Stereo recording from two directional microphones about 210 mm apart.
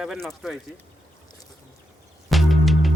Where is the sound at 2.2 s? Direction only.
Centre (ahead or behind).